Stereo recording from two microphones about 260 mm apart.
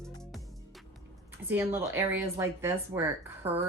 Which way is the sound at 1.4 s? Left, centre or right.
Centre.